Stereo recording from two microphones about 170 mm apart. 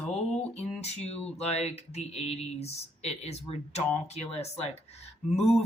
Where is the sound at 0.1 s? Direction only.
40° left (ahead or behind).